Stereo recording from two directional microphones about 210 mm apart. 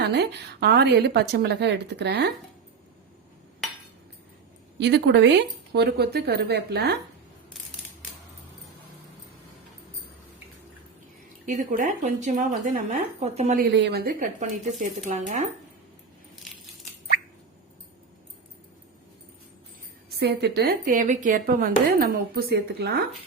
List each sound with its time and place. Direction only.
0.0 s a woman's voice: 50° right (ahead or behind)
4.8 s a woman's voice: 55° right (ahead or behind)
11.4 s speech: 40° right (ahead or behind)
13.7 s speech: 50° right (ahead or behind); by 15.4 s 35° right (ahead or behind)
20.1 s a woman's voice: 50° right (ahead or behind)